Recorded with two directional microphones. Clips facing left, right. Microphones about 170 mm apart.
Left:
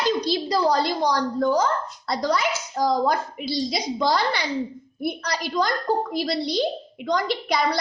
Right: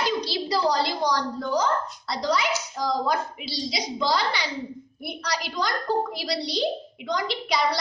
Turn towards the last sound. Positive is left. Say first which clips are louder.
# left 2 dB
turn(degrees=50)  # may be behind; listen again after turning